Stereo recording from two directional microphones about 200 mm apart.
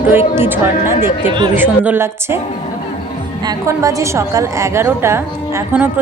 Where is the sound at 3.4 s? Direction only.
15° right (ahead or behind).